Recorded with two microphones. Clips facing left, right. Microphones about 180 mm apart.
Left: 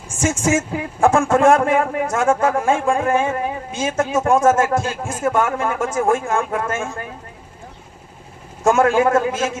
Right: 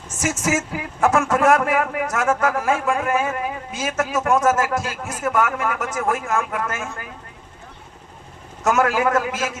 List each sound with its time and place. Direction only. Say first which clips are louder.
0.2 s speech: left 4 dB; 30° left (ahead or behind)
8.6 s speech: left 4 dB; 30° left (ahead or behind)